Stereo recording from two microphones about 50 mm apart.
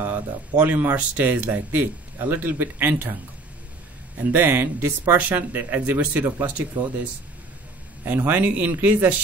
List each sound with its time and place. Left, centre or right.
0.0 s speech: right
4.2 s speech: right